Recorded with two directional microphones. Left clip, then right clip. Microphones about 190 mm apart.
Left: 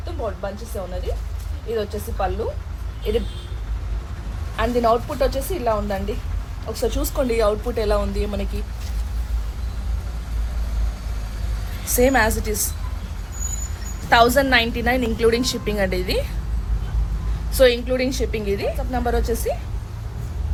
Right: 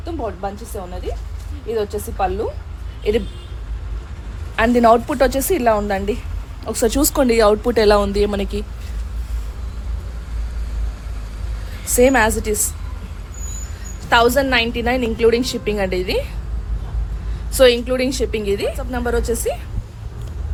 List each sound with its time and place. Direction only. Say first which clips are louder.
0.7 s a woman's voice: right 1 dB; 65° right (ahead or behind)
4.5 s a woman's voice: right 6 dB; 65° right (ahead or behind); by 8.4 s 45° right (ahead or behind)
11.9 s a woman's voice: right 4 dB; 30° right (ahead or behind)
14.1 s a woman's voice: right 1 dB; 10° right (ahead or behind)
17.5 s a woman's voice: right 3 dB; 25° right (ahead or behind)
18.9 s a woman's voice: right 2 dB; 10° right (ahead or behind)